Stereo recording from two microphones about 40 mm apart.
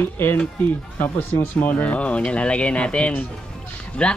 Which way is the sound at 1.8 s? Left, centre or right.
Left.